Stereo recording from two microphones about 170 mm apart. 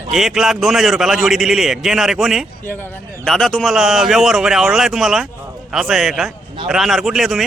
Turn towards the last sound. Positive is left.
turn(degrees=0)  # may be behind; listen again after turning